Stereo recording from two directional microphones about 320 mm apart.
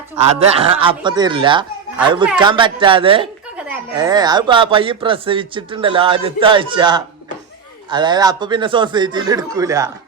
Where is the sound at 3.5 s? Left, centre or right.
Centre.